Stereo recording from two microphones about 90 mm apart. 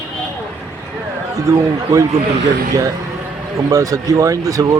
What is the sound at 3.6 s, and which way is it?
Speech, 40° right (ahead or behind).